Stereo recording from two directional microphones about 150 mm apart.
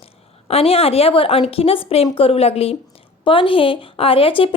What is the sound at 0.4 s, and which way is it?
A woman's voice, 40° left (ahead or behind).